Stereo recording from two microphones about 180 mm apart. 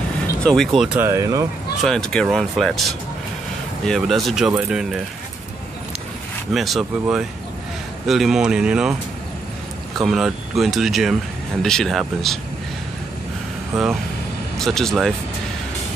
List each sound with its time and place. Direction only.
0.4 s speech: 5° left (ahead or behind)
0.9 s speech: 15° right (ahead or behind)
1.8 s speech: centre (ahead or behind)
6.5 s speech: centre (ahead or behind)
9.9 s speech: centre (ahead or behind)
13.7 s speech: centre (ahead or behind)